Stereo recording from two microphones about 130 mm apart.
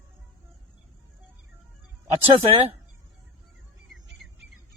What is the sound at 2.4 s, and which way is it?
Speech, 50° right (ahead or behind).